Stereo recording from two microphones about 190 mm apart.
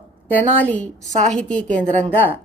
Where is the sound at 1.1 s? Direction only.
35° right (ahead or behind).